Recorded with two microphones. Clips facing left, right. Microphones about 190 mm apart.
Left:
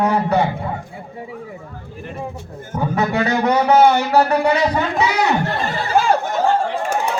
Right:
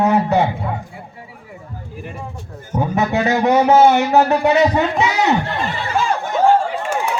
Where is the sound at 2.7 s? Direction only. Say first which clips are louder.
Right 1 dB; 20° right (ahead or behind).